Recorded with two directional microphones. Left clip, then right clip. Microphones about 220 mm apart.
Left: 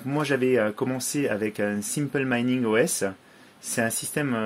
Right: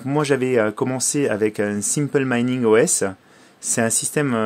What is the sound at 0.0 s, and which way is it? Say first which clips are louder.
Speech: right 5 dB; 50° right (ahead or behind).